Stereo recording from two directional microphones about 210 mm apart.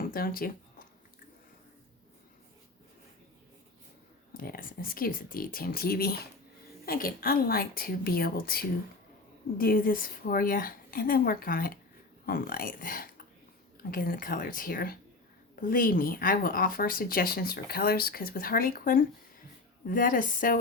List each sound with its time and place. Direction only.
0.0 s speech: 45° left (ahead or behind)
4.4 s speech: 45° left (ahead or behind)